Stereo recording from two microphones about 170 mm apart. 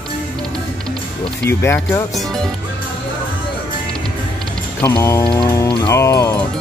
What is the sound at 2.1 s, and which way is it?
Speech, centre (ahead or behind).